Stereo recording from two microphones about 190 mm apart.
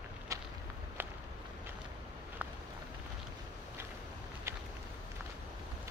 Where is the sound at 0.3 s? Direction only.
15° right (ahead or behind).